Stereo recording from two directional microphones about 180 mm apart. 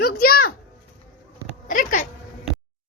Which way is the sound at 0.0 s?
55° left (ahead or behind).